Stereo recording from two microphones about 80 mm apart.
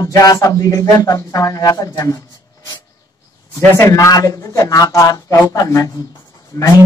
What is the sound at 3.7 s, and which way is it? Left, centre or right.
Speech, left.